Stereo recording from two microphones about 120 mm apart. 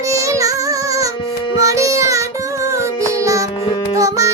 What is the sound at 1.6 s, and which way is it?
Music, 25° right (ahead or behind).